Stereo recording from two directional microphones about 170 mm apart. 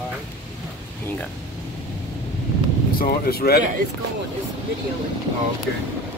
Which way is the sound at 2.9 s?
60° left (ahead or behind).